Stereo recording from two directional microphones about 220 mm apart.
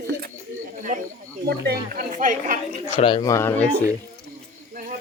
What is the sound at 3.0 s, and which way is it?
Speech, 20° left (ahead or behind).